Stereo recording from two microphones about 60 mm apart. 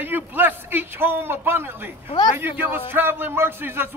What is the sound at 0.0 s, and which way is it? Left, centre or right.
A man's voice, right.